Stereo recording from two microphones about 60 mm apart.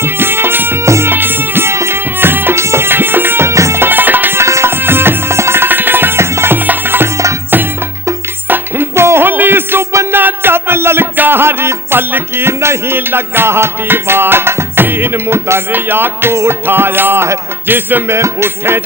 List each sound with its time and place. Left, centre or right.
0.0 s music: right
0.8 s music: right
1.1 s music: right
2.1 s music: right
2.6 s music: right
3.5 s music: right
3.8 s music: right
4.4 s tabla: right
4.7 s music: right
9.0 s music: right
9.9 s music: right
10.2 s music: right
18.1 s music: right